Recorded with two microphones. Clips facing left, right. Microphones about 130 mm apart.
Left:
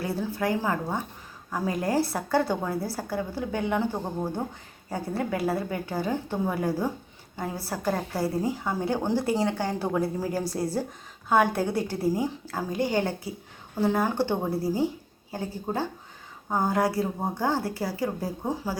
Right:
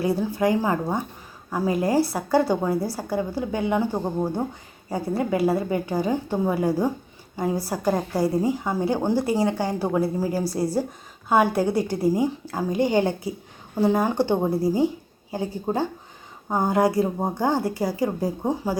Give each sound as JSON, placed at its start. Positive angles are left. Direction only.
{"t": 0.0, "sound": "a woman's voice", "side_deg": -15}